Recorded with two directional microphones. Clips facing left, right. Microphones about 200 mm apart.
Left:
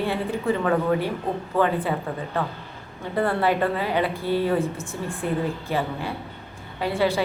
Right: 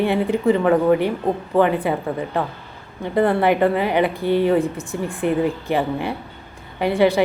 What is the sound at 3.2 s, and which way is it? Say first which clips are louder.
A woman's voice: right 6 dB; 20° right (ahead or behind).